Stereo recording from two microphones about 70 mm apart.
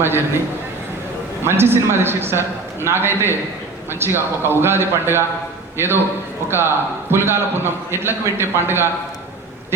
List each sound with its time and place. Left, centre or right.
0.0 s a man's voice: right
1.5 s a man's voice: right